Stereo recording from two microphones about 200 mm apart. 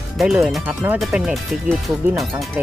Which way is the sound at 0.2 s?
Centre (ahead or behind).